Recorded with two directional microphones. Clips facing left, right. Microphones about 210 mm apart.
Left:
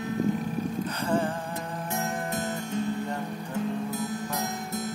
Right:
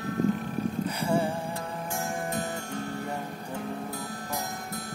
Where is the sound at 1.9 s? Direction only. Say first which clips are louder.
Left 1 dB; 20° left (ahead or behind).